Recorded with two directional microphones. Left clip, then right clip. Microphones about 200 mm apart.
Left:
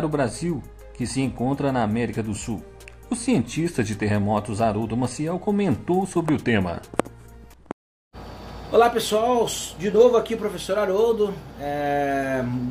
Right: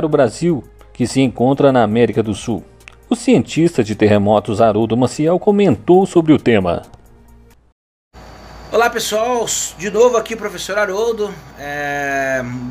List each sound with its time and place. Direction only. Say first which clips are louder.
0.0 s speech: right 10 dB; 45° right (ahead or behind)
8.7 s a man's voice: right 3 dB; 5° left (ahead or behind)